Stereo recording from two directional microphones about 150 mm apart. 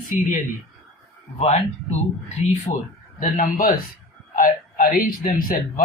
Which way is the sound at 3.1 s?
65° left (ahead or behind).